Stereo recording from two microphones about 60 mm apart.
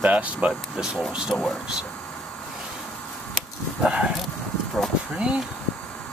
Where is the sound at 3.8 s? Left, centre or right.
Centre.